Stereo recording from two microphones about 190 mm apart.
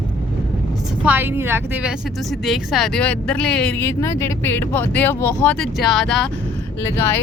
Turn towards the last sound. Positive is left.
turn(degrees=15)  # may be behind; listen again after turning